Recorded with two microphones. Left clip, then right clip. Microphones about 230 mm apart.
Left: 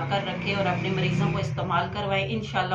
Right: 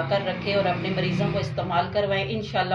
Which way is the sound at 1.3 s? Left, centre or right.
Centre.